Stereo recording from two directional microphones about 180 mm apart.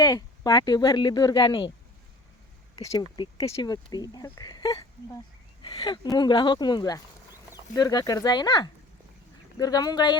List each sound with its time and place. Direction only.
0.0 s speech: 20° left (ahead or behind)
2.9 s speech: 25° left (ahead or behind)